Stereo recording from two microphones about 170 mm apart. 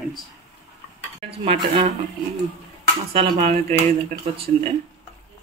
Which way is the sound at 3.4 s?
45° right (ahead or behind).